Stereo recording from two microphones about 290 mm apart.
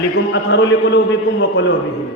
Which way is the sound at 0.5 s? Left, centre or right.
Left.